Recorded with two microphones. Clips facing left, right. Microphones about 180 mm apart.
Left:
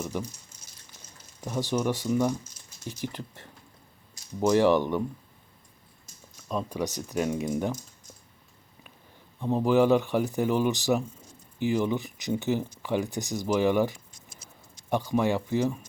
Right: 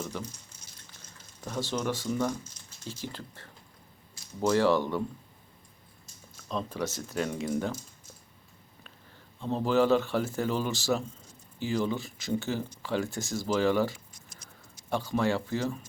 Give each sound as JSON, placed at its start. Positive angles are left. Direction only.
{"t": 0.0, "sound": "speech", "side_deg": 10}
{"t": 1.5, "sound": "speech", "side_deg": 15}
{"t": 6.5, "sound": "speech", "side_deg": 10}
{"t": 9.4, "sound": "speech", "side_deg": 15}